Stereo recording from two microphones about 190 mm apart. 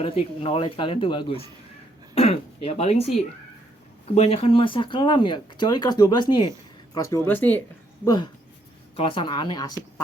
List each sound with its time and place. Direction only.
0.0 s speech: 30° left (ahead or behind); by 7.6 s 10° left (ahead or behind)
8.0 s speech: 20° left (ahead or behind)